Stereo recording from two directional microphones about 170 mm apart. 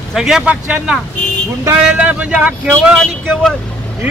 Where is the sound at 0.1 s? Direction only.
5° right (ahead or behind).